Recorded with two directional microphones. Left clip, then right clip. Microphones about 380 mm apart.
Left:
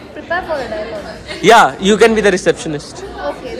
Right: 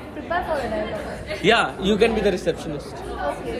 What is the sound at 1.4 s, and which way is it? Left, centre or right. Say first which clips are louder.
A man's voice: left 11 dB; centre.